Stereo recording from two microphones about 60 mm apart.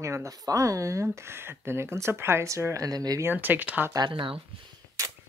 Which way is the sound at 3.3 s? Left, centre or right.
Right.